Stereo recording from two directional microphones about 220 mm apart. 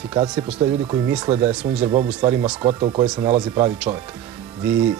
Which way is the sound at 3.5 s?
10° right (ahead or behind).